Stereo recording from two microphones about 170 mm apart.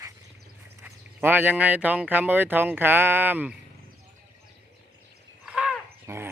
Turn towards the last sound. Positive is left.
turn(degrees=-10)  # may be behind; listen again after turning